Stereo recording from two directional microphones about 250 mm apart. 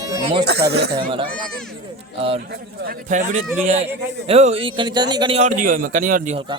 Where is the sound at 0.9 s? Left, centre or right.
Centre.